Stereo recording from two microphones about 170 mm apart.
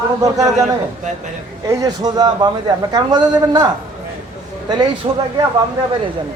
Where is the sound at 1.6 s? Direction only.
20° right (ahead or behind).